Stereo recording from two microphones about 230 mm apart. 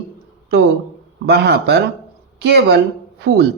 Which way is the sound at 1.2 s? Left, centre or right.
Right.